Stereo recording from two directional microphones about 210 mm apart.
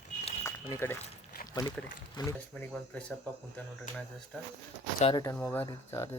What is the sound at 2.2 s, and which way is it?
Speech, 20° left (ahead or behind).